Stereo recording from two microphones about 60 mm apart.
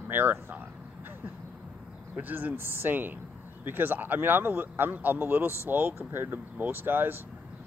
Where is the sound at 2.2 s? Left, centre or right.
Right.